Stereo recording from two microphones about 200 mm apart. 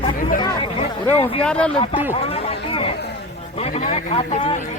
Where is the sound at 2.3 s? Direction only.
30° left (ahead or behind).